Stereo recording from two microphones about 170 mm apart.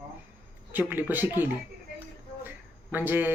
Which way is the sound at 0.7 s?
10° right (ahead or behind).